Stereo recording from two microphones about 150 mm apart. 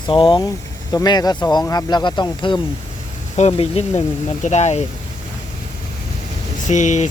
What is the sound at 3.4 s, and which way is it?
Speech, 45° left (ahead or behind).